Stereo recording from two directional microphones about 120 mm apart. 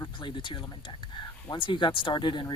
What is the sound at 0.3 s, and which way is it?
Speech, 40° left (ahead or behind).